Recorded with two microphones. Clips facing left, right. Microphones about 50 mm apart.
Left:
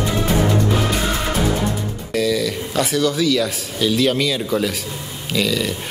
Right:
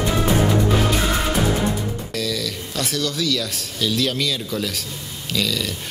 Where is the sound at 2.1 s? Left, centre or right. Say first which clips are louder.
Left 9 dB; centre.